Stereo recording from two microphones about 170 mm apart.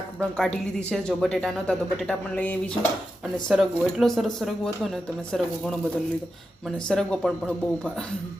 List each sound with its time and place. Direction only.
0.2 s speech: 5° left (ahead or behind)
6.8 s speech: 5° left (ahead or behind)